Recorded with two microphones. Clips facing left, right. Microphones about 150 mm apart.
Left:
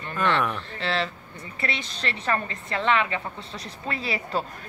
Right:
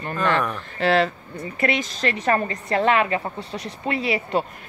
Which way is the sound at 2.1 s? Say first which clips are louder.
Right 5 dB; 35° right (ahead or behind).